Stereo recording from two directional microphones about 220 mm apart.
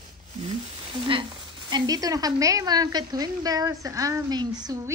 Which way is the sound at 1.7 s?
15° right (ahead or behind).